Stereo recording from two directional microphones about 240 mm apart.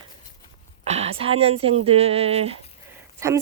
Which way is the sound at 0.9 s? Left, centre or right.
Right.